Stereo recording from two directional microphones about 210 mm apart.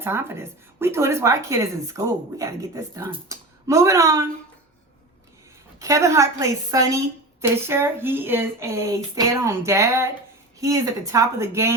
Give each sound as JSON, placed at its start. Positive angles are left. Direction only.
{"t": 0.0, "sound": "speech", "side_deg": -10}
{"t": 5.8, "sound": "speech", "side_deg": -15}